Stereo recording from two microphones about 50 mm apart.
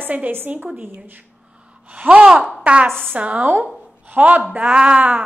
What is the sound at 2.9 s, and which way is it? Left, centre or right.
Speech, centre.